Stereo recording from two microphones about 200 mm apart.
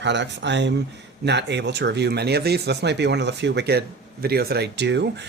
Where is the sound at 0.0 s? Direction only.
60° right (ahead or behind).